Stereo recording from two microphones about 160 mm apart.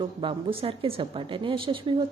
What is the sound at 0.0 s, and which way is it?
A woman's voice, 30° right (ahead or behind).